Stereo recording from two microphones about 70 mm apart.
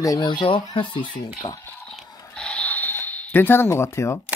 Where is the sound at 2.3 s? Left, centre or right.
Centre; by 4.4 s left.